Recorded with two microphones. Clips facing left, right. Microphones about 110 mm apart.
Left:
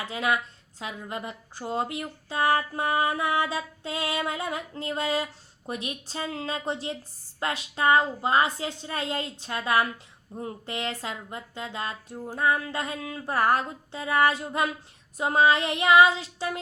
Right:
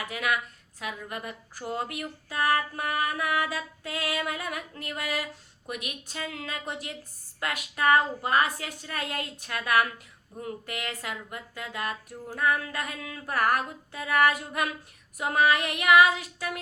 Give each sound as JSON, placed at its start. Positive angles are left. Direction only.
{"t": 0.0, "sound": "speech", "side_deg": 30}